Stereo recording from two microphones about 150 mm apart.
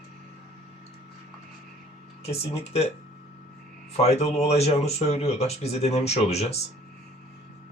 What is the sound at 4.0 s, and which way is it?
Speech, 45° left (ahead or behind).